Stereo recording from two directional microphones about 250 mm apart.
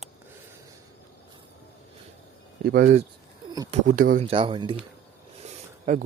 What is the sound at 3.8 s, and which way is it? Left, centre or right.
Speech, right.